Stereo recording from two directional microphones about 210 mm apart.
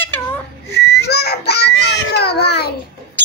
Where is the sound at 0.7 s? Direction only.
10° left (ahead or behind).